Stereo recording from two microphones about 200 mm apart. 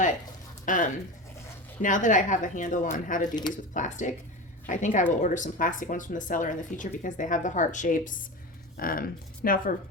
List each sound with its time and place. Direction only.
0.6 s speech: 40° left (ahead or behind)